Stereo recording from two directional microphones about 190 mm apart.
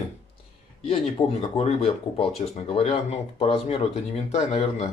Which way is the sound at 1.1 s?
30° left (ahead or behind).